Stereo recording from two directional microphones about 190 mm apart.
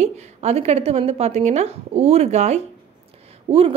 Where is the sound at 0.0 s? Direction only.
35° right (ahead or behind).